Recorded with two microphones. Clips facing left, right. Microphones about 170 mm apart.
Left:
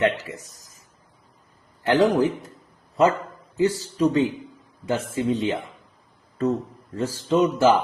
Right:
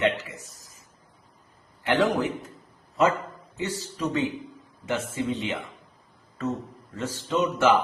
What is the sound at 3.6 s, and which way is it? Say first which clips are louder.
A man's voice: left 9 dB; 35° left (ahead or behind).